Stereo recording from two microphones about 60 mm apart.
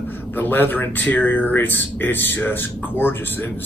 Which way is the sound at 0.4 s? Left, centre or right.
Left.